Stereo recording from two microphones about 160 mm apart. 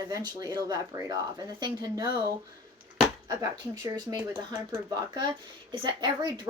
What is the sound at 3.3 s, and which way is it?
Speech, 25° right (ahead or behind).